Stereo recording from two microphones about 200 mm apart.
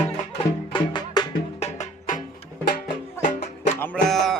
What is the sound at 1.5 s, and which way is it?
Music, 35° left (ahead or behind).